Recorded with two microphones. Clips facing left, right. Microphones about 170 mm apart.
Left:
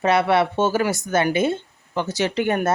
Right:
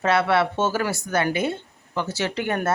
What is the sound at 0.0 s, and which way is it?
A woman's voice, 15° left (ahead or behind).